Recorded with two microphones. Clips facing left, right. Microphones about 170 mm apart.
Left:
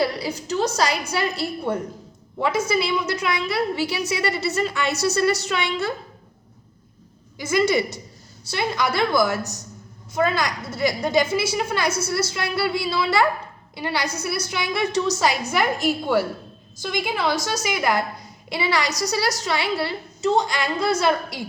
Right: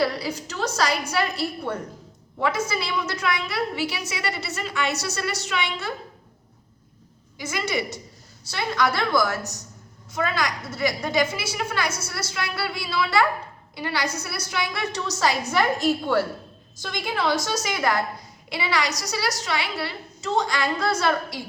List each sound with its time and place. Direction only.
0.0 s a woman's voice: 20° left (ahead or behind)
3.8 s a woman's voice: 35° left (ahead or behind)
7.3 s a woman's voice: 35° left (ahead or behind)
8.4 s a woman's voice: 15° left (ahead or behind)
10.2 s a woman's voice: 30° left (ahead or behind)
13.7 s a woman's voice: 20° left (ahead or behind)
18.4 s a woman's voice: 30° left (ahead or behind)
20.5 s a woman's voice: 15° left (ahead or behind)